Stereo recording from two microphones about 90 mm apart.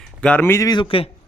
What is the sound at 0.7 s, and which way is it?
Speech, 70° left (ahead or behind).